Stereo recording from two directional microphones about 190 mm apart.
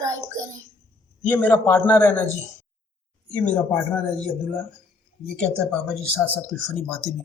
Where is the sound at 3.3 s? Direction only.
10° left (ahead or behind).